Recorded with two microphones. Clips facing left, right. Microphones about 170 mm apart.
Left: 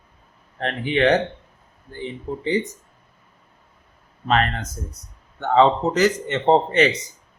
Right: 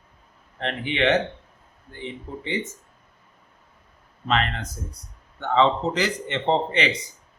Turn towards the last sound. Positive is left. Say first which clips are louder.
# left 6 dB
turn(degrees=45)  # may be behind; listen again after turning